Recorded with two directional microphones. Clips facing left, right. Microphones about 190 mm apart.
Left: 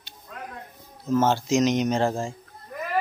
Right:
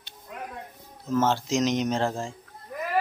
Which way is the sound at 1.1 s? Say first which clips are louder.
Left 3 dB; 5° left (ahead or behind).